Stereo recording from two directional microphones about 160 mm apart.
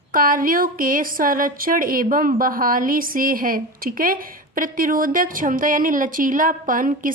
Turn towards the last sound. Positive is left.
turn(degrees=-55)  # may be behind; listen again after turning